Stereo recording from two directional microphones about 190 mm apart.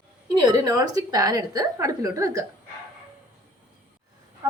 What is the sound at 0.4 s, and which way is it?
A woman's voice, 20° right (ahead or behind).